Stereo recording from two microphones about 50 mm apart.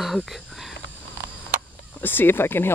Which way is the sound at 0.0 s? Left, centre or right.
Centre.